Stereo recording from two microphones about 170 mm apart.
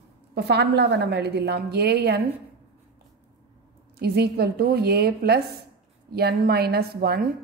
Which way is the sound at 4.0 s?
70° right (ahead or behind).